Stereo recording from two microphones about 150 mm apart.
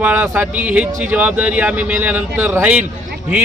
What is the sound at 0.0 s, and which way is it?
Speech, 15° right (ahead or behind).